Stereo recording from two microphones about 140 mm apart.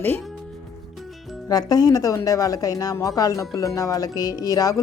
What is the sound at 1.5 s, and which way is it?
Speech, 25° left (ahead or behind).